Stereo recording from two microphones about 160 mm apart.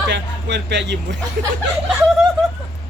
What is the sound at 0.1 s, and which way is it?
A man's voice, 90° right.